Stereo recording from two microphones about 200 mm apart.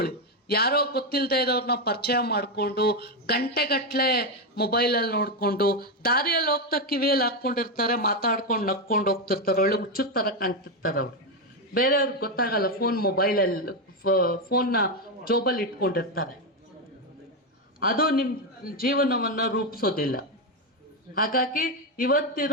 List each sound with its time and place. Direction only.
0.0 s a man's voice: 55° left (ahead or behind)
17.7 s a man's voice: 45° left (ahead or behind)